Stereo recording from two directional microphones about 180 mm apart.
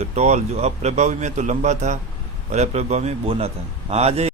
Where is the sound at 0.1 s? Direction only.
40° right (ahead or behind).